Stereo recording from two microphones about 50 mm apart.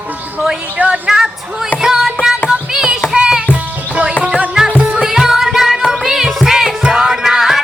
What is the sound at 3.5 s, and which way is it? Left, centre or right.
Music, right.